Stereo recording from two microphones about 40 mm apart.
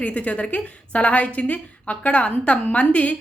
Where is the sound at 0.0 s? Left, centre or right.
Left.